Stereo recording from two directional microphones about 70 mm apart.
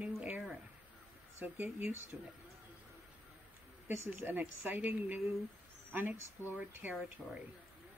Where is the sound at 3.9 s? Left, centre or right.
Right.